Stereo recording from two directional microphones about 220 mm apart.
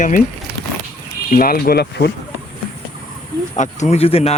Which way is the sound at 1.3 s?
40° left (ahead or behind).